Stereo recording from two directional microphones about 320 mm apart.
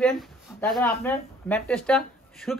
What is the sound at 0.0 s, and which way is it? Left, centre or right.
Speech, centre.